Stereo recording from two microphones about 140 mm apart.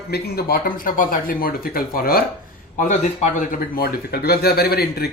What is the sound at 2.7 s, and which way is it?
Speech, 60° left (ahead or behind).